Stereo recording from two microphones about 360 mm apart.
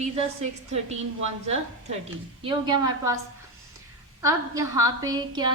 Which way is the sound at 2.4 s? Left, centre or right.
Centre.